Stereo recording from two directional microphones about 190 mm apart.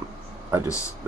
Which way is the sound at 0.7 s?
15° left (ahead or behind).